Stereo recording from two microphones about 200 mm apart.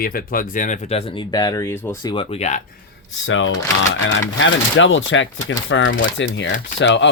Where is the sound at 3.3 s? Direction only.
75° left (ahead or behind).